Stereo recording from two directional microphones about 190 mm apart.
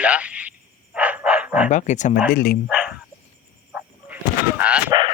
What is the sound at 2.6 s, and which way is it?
Bow-wow, 5° right (ahead or behind).